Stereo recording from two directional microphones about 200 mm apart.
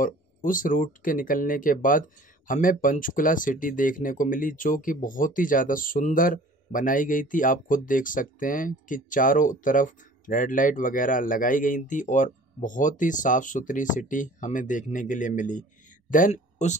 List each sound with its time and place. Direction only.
0.0 s speech: 40° left (ahead or behind)